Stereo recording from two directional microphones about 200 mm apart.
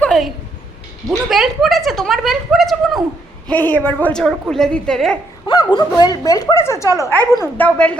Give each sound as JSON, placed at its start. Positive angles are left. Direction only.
{"t": 0.0, "sound": "a sound", "side_deg": 5}
{"t": 1.0, "sound": "a woman's voice", "side_deg": 0}
{"t": 5.5, "sound": "a woman's voice", "side_deg": 20}